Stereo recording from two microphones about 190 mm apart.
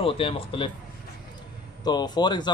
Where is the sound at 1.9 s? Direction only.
20° left (ahead or behind).